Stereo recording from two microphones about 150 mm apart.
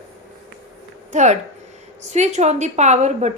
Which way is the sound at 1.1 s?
50° right (ahead or behind).